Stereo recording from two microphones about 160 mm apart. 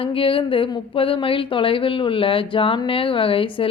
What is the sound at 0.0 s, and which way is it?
A woman's voice, 35° left (ahead or behind).